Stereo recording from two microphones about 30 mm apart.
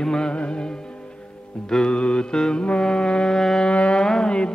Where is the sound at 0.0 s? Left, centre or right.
Left.